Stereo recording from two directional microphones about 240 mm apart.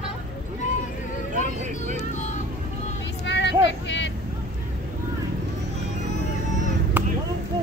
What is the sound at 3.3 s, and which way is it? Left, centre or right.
Vehicle, left.